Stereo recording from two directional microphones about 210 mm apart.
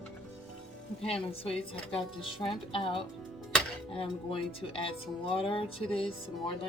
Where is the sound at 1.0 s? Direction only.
25° left (ahead or behind).